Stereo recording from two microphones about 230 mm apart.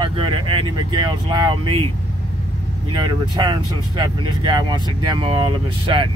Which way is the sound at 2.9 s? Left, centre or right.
Right.